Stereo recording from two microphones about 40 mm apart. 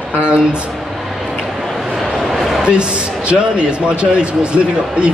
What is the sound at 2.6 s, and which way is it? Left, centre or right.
A man's voice, right.